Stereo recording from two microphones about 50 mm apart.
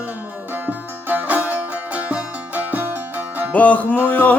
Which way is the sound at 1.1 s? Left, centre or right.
Right.